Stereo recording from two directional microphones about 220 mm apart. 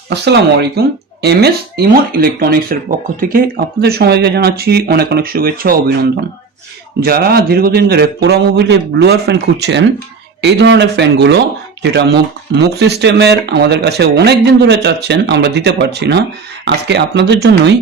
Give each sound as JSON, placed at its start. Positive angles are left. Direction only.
{"t": 0.1, "sound": "speech", "side_deg": -50}